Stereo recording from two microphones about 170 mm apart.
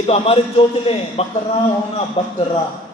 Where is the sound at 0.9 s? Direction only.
35° left (ahead or behind).